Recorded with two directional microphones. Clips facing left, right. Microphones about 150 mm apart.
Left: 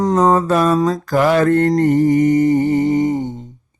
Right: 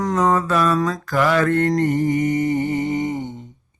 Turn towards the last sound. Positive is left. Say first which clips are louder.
# left 7 dB
turn(degrees=40)  # may be behind; listen again after turning